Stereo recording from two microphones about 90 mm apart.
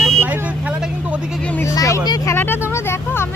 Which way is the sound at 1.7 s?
40° left (ahead or behind).